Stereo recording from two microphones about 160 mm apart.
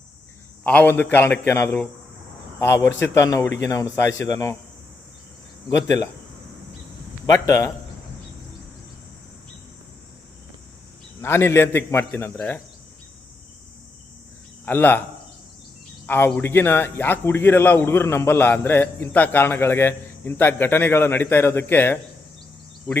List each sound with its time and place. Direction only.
0.6 s a man's voice: 10° left (ahead or behind)
5.6 s speech: 20° left (ahead or behind)
7.3 s speech: 20° left (ahead or behind)
11.2 s a man's voice: 15° left (ahead or behind)
14.6 s speech: 10° left (ahead or behind)
16.0 s a man's voice: 15° left (ahead or behind)